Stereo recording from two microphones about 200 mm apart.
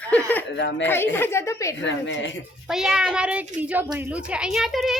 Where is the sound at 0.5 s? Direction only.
65° left (ahead or behind).